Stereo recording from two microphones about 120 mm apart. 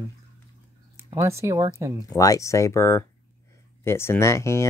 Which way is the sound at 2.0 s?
30° left (ahead or behind).